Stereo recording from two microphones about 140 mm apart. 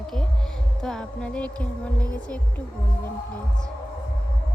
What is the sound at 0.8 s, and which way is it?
Speech, 5° left (ahead or behind).